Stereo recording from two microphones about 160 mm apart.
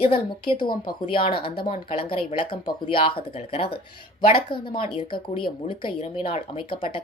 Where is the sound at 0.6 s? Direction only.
30° left (ahead or behind).